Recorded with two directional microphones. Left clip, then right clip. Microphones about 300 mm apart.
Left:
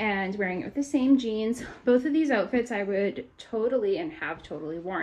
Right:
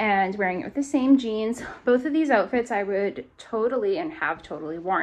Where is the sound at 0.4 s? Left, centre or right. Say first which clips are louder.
Right 4 dB; centre.